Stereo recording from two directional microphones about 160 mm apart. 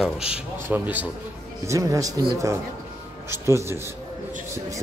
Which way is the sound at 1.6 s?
20° right (ahead or behind).